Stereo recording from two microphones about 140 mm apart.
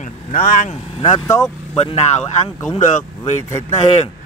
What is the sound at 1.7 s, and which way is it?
Speech, 50° left (ahead or behind).